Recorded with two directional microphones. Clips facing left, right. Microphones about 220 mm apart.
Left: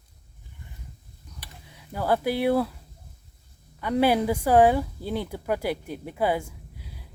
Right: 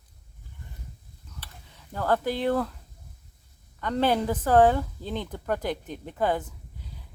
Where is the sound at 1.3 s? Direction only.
15° left (ahead or behind).